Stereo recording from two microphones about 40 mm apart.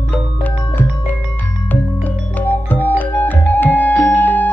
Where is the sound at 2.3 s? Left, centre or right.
Left.